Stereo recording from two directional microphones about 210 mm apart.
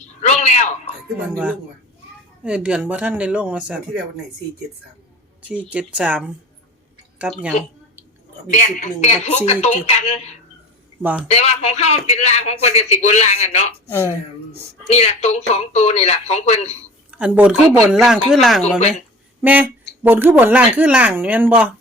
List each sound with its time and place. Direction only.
0.0 s a sound: 30° left (ahead or behind)
2.4 s speech: 5° right (ahead or behind)
5.4 s speech: 5° right (ahead or behind)
8.4 s a man's voice: 35° left (ahead or behind)
13.8 s speech: 10° left (ahead or behind)
14.8 s a man's voice: 30° left (ahead or behind)
17.1 s a woman's voice: 5° right (ahead or behind)